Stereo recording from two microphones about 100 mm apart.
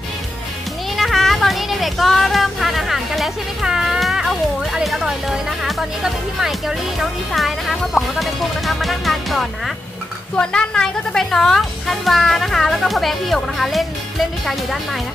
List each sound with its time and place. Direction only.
0.9 s child singing: centre (ahead or behind)
4.7 s a woman's voice: 5° right (ahead or behind)
7.0 s a woman's voice: centre (ahead or behind)